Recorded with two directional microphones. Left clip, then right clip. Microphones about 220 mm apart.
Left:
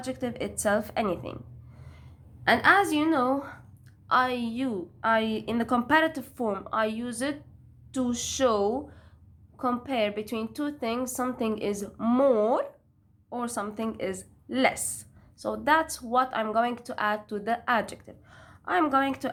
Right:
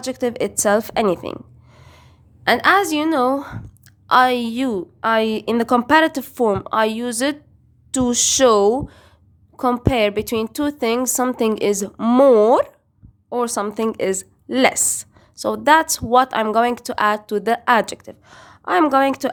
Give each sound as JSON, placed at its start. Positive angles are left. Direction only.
{"t": 0.0, "sound": "a woman's voice", "side_deg": -45}